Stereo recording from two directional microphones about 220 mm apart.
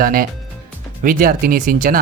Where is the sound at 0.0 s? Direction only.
40° right (ahead or behind).